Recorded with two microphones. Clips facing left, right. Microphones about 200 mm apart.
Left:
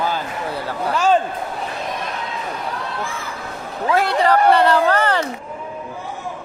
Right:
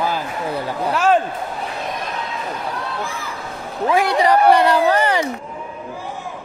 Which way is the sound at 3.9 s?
15° right (ahead or behind).